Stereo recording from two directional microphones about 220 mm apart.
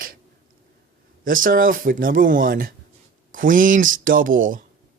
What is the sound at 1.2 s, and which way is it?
Speech, 40° right (ahead or behind).